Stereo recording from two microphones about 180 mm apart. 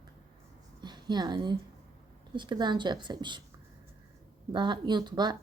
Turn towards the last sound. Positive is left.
turn(degrees=-25)  # may be behind; listen again after turning